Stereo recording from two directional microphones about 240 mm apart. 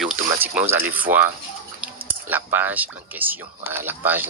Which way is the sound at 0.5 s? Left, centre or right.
Centre.